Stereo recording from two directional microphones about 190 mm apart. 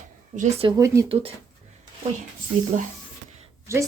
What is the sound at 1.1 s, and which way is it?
Speech, 30° right (ahead or behind).